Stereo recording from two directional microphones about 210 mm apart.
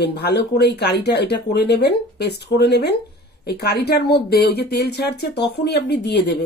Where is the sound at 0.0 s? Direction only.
50° left (ahead or behind).